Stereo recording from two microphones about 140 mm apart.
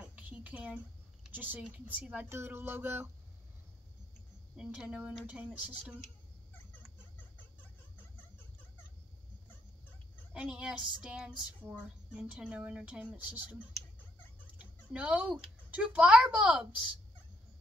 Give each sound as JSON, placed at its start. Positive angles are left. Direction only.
{"t": 0.0, "sound": "a sound", "side_deg": -10}
{"t": 1.3, "sound": "speech", "side_deg": -10}
{"t": 4.6, "sound": "speech", "side_deg": -10}
{"t": 10.3, "sound": "speech", "side_deg": -10}
{"t": 14.6, "sound": "a sound", "side_deg": -5}
{"t": 15.7, "sound": "speech", "side_deg": -10}